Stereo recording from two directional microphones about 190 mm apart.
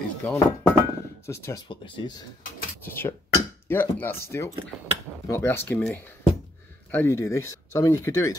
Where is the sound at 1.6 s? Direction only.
25° left (ahead or behind).